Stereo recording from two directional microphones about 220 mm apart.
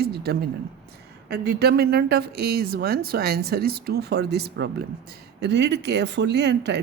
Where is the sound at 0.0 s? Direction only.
45° right (ahead or behind).